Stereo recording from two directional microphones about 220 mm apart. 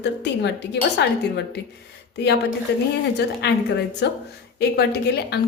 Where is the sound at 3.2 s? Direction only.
50° left (ahead or behind).